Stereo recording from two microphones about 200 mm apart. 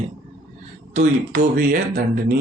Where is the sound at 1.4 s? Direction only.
45° right (ahead or behind).